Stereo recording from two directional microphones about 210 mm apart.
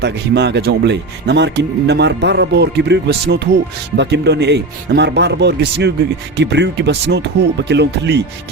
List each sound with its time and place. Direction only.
0.0 s speech: 55° right (ahead or behind)